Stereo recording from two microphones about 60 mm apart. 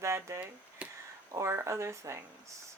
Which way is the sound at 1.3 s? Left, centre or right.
Right.